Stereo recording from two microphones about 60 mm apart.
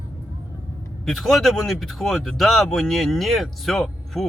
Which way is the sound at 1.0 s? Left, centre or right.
Centre.